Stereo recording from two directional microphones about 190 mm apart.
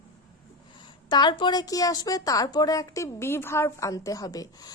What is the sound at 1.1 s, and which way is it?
A woman's voice, 25° left (ahead or behind).